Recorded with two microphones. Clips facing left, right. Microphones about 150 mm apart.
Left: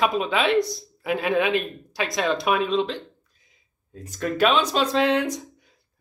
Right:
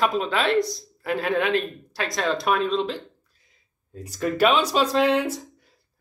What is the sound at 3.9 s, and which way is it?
Speech, 10° right (ahead or behind).